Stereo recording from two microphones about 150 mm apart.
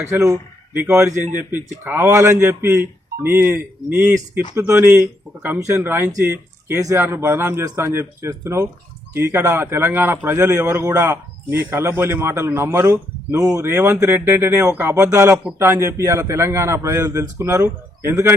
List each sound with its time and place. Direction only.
0.0 s a man's voice: 20° right (ahead or behind)